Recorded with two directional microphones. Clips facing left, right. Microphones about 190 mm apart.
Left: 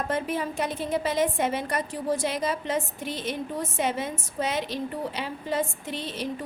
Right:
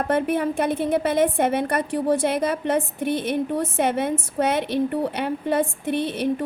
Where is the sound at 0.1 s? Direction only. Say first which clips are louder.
Right 7 dB; 60° right (ahead or behind).